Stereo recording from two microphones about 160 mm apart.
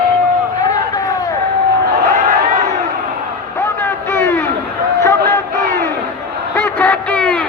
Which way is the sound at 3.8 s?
15° left (ahead or behind).